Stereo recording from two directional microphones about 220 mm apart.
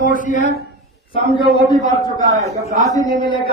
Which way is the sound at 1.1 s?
20° left (ahead or behind).